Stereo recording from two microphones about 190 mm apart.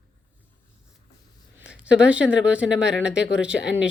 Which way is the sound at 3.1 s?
70° left (ahead or behind).